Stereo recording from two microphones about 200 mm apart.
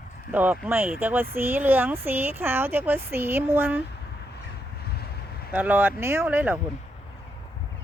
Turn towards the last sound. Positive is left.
turn(degrees=-10)  # may be behind; listen again after turning